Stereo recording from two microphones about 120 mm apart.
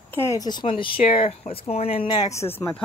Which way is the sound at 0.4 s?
40° left (ahead or behind).